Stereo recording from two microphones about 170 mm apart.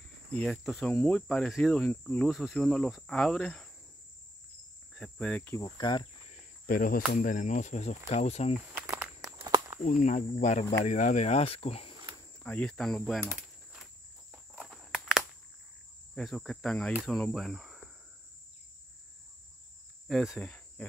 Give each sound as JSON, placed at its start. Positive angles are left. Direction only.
{"t": 0.4, "sound": "cricket", "side_deg": 0}
{"t": 4.9, "sound": "cricket", "side_deg": 5}
{"t": 5.8, "sound": "speech", "side_deg": 25}
{"t": 6.6, "sound": "speech", "side_deg": 55}
{"t": 8.7, "sound": "walk", "side_deg": -10}
{"t": 9.8, "sound": "speech", "side_deg": 45}
{"t": 12.4, "sound": "cricket", "side_deg": 5}
{"t": 14.6, "sound": "walk", "side_deg": 0}
{"t": 16.2, "sound": "cricket", "side_deg": 5}
{"t": 16.9, "sound": "speech", "side_deg": 0}
{"t": 20.1, "sound": "cricket", "side_deg": 0}